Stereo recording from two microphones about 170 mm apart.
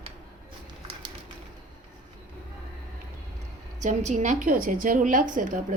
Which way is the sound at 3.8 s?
45° right (ahead or behind).